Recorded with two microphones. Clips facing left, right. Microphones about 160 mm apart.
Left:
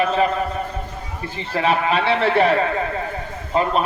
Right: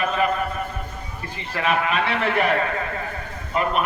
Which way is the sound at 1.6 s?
30° left (ahead or behind).